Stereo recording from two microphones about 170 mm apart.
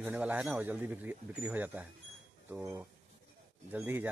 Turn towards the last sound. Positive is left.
turn(degrees=-10)  # may be behind; listen again after turning